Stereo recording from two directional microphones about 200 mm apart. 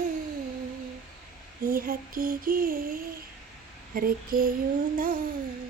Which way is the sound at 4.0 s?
45° right (ahead or behind).